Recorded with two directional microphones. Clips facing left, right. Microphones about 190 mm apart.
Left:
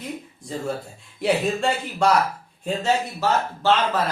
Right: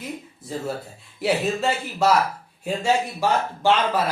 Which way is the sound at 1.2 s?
5° right (ahead or behind).